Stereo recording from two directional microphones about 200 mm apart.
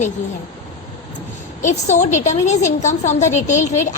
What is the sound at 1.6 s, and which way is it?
A woman's voice, 35° left (ahead or behind).